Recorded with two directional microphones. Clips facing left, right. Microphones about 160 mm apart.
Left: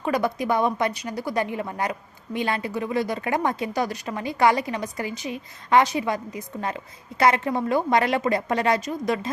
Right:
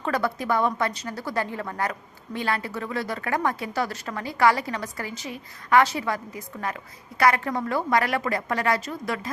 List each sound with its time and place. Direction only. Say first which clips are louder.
0.0 s a woman's voice: left 2 dB; 15° left (ahead or behind)